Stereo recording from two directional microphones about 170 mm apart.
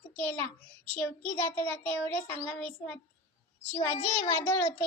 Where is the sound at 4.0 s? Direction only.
40° left (ahead or behind).